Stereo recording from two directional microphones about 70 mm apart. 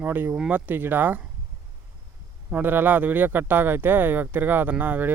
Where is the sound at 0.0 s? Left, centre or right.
Right.